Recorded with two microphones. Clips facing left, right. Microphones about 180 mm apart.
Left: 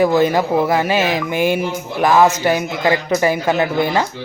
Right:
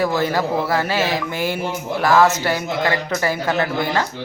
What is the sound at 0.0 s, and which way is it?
Speech, 20° left (ahead or behind).